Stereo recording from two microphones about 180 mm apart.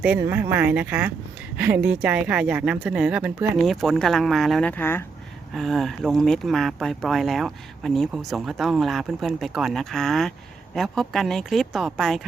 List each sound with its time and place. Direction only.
0.0 s speech: 10° right (ahead or behind)
4.8 s speech: 10° left (ahead or behind)
5.5 s speech: centre (ahead or behind)